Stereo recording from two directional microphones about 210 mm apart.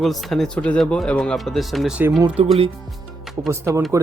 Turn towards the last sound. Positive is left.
turn(degrees=-15)  # may be behind; listen again after turning